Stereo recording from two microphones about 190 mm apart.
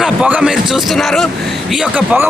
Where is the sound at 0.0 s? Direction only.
5° right (ahead or behind).